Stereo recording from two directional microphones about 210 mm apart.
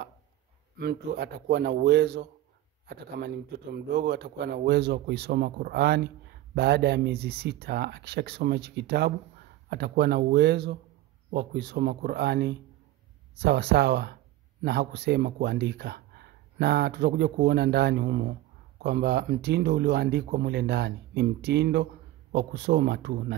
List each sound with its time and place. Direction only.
0.7 s speech: 50° right (ahead or behind)